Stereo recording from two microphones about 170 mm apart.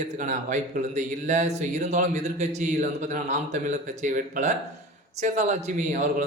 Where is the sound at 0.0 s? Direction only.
45° right (ahead or behind).